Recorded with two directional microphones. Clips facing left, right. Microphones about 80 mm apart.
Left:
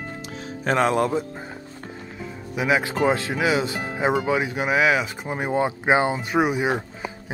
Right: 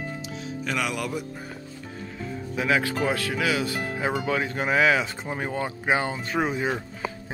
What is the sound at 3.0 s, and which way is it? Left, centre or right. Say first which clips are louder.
Speech: left 4 dB; left.